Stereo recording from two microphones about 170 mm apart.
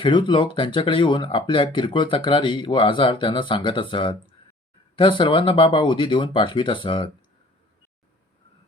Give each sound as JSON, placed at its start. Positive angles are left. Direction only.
{"t": 0.0, "sound": "speech", "side_deg": 25}